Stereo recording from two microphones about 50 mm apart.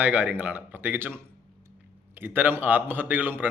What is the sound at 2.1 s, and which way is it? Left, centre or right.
A man's voice, right.